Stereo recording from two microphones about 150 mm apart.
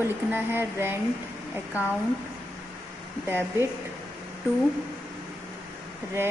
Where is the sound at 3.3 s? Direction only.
15° right (ahead or behind).